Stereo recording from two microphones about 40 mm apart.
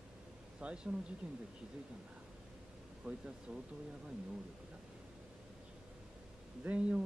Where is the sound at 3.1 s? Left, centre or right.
Right.